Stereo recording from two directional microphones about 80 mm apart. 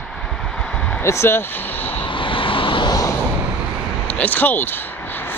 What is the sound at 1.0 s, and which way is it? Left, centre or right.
Speech, left.